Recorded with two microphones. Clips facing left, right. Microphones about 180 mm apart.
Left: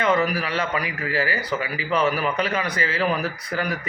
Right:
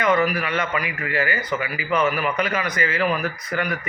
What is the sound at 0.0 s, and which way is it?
A man's voice, 30° left (ahead or behind).